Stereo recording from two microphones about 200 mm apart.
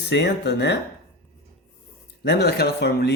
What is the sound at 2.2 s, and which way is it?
Speech, 55° left (ahead or behind).